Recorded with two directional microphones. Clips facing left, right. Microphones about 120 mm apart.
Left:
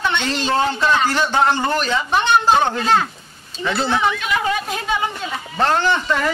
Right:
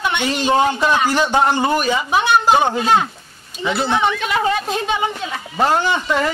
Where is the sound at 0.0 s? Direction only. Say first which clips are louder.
Right 2 dB; 10° right (ahead or behind).